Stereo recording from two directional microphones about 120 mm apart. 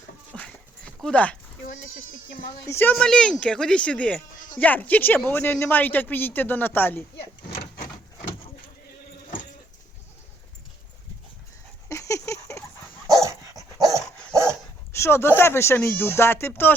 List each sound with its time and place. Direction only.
0.3 s dog: 10° left (ahead or behind)
1.0 s speech: 10° left (ahead or behind)
2.6 s speech: 20° left (ahead or behind)
2.9 s speech: 5° left (ahead or behind)
11.9 s a sound: 25° left (ahead or behind)
13.1 s dog: 30° right (ahead or behind)
14.9 s speech: 20° left (ahead or behind)